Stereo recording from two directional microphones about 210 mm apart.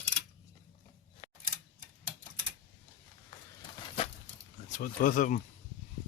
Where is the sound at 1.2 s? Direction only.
30° left (ahead or behind).